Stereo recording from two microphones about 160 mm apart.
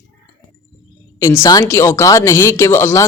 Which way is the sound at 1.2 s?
20° left (ahead or behind).